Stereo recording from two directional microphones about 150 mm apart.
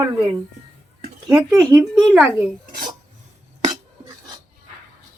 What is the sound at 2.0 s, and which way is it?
Speech, centre (ahead or behind).